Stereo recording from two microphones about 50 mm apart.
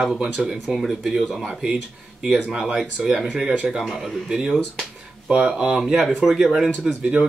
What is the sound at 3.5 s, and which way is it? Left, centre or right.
Speech, centre.